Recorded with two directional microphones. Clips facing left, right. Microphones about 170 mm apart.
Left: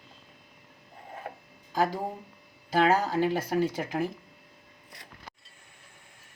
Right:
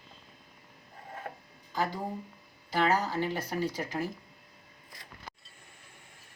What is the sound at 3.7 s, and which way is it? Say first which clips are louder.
Speech: left 4 dB; 55° left (ahead or behind).